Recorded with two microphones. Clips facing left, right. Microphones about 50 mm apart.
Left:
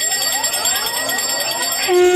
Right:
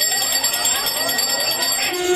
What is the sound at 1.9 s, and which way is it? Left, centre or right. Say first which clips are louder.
Jingle bell: left 10 dB; left.